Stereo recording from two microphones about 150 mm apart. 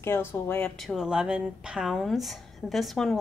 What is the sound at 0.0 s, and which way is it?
Speech, 15° left (ahead or behind).